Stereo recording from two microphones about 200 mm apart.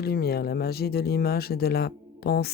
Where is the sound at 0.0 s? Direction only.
50° left (ahead or behind).